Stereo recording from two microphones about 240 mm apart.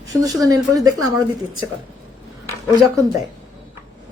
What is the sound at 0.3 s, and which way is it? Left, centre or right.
Speech, centre.